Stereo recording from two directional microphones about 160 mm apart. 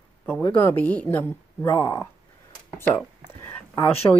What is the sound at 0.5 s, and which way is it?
A woman's voice, 15° left (ahead or behind).